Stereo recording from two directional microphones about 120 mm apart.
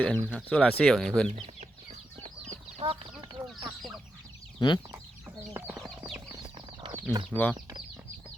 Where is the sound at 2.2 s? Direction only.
90° right.